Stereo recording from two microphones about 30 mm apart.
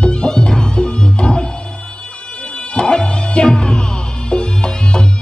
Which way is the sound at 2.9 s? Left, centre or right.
Left.